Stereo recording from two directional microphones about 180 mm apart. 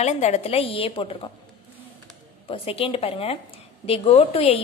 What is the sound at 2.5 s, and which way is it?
A woman's voice, 30° left (ahead or behind).